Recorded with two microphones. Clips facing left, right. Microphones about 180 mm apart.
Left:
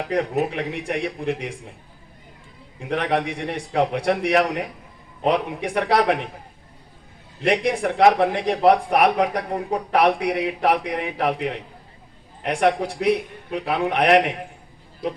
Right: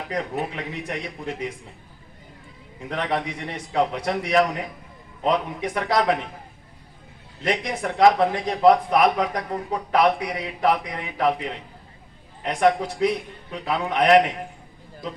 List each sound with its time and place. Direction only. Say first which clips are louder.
0.1 s speech: left 5 dB; 70° left (ahead or behind)
2.9 s speech: left 4 dB; 70° left (ahead or behind)
7.4 s speech: left 5 dB; 70° left (ahead or behind)